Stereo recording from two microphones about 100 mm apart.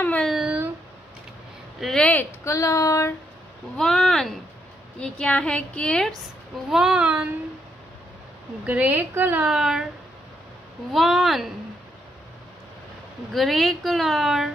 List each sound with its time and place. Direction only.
0.2 s a woman's voice: 5° right (ahead or behind)
1.8 s a woman's voice: 5° left (ahead or behind)
2.4 s speech: 30° left (ahead or behind)
3.7 s a woman's voice: 5° left (ahead or behind)
6.7 s child singing: 5° right (ahead or behind)
8.6 s a woman's voice: 15° right (ahead or behind)
9.5 s a woman's voice: 5° right (ahead or behind)
10.9 s a woman's voice: centre (ahead or behind)
13.3 s a woman's voice: centre (ahead or behind)